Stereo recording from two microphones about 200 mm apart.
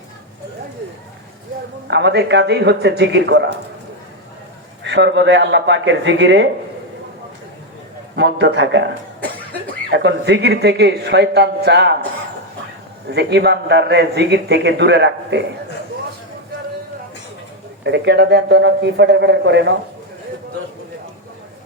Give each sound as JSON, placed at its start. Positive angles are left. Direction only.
{"t": 1.9, "sound": "speech", "side_deg": -60}
{"t": 4.8, "sound": "speech", "side_deg": -60}
{"t": 8.1, "sound": "speech", "side_deg": -60}
{"t": 13.1, "sound": "speech", "side_deg": -55}
{"t": 17.8, "sound": "speech", "side_deg": -60}